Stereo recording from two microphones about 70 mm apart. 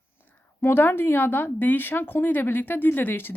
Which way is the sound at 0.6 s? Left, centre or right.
Left.